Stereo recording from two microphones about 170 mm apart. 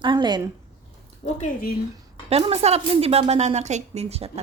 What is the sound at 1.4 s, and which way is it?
Speech, 55° left (ahead or behind).